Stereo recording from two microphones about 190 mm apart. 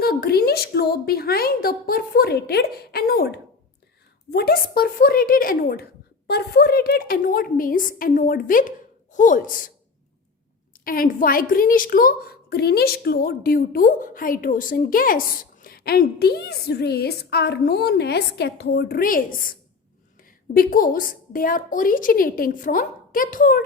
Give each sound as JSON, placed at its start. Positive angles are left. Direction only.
{"t": 0.0, "sound": "a sound", "side_deg": 55}
{"t": 4.3, "sound": "speech", "side_deg": 55}
{"t": 10.8, "sound": "a woman's voice", "side_deg": 50}